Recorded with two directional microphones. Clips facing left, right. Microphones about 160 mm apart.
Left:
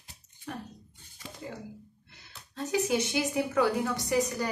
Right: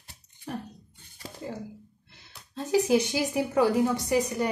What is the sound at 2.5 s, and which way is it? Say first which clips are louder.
A woman's voice: right 5 dB; 30° right (ahead or behind).